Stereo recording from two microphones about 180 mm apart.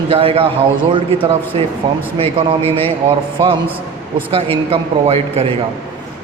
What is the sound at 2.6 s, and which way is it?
Speech, 15° left (ahead or behind).